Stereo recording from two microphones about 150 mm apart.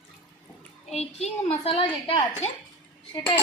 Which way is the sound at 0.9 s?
45° left (ahead or behind).